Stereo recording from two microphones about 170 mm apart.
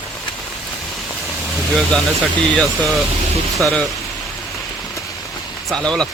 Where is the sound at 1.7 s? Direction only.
Centre (ahead or behind).